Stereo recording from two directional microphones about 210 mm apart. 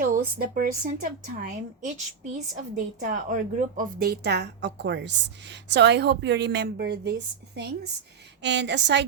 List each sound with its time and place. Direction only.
0.0 s a woman's voice: 45° right (ahead or behind)